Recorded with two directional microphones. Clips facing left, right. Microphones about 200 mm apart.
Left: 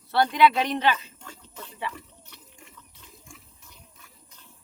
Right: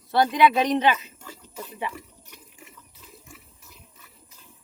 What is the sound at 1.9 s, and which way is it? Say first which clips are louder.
Water: right 3 dB; 10° right (ahead or behind).